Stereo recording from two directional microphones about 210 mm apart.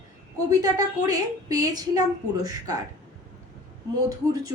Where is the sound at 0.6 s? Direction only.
15° right (ahead or behind).